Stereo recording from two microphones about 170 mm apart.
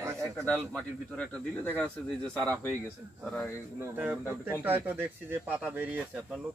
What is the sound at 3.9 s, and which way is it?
Speech, 15° right (ahead or behind).